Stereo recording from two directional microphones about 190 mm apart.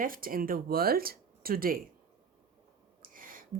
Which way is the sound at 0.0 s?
50° right (ahead or behind).